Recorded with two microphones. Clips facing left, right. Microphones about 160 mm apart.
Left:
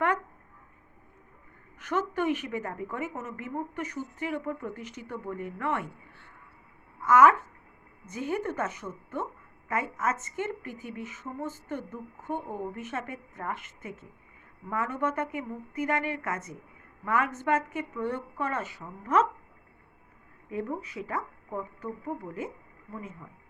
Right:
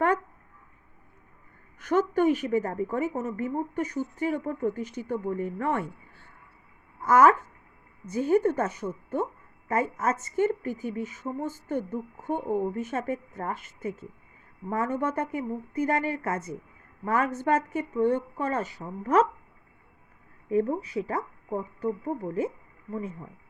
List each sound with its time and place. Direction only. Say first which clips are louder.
1.8 s a woman's voice: right 6 dB; 35° right (ahead or behind)
20.5 s a woman's voice: right 8 dB; 35° right (ahead or behind)